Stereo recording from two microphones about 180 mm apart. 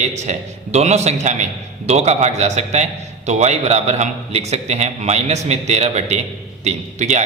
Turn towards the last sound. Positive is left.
turn(degrees=-40)  # may be behind; listen again after turning